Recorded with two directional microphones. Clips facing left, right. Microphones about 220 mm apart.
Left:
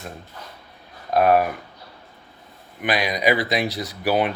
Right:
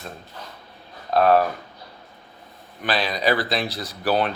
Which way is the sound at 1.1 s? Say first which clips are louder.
Even; 15° left (ahead or behind).